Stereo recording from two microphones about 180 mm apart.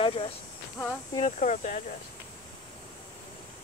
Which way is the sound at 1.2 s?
40° left (ahead or behind).